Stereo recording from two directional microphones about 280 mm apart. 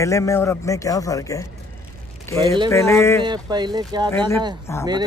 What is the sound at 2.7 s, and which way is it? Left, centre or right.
Speech, centre.